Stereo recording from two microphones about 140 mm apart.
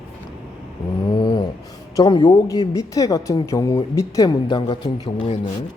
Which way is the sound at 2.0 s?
30° left (ahead or behind).